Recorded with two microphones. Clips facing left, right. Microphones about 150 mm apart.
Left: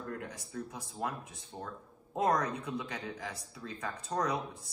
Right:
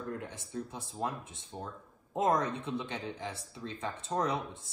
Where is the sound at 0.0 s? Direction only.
25° right (ahead or behind).